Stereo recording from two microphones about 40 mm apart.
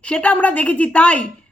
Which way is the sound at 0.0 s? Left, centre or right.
Left.